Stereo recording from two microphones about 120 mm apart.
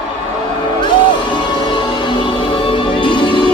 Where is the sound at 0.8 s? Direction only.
40° left (ahead or behind).